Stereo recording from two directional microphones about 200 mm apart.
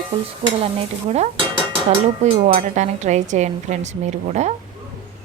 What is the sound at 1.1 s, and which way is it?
Speech, 35° right (ahead or behind).